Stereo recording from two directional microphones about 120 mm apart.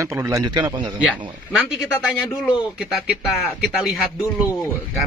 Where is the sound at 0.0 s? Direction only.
25° right (ahead or behind).